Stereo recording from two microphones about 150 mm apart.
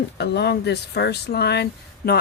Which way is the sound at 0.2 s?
90° left.